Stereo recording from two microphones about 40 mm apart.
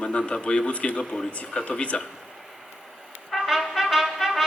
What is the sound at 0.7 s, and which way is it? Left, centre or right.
A man's voice, left.